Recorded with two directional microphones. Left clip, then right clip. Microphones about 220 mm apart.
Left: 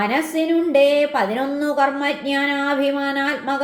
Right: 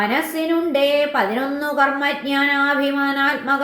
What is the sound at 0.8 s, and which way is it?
A woman's voice, 35° left (ahead or behind).